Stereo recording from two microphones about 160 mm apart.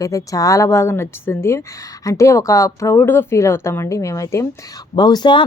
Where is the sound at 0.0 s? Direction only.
20° left (ahead or behind).